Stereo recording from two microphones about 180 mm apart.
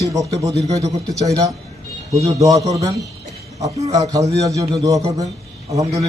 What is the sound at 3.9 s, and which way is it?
A man's voice, 20° right (ahead or behind).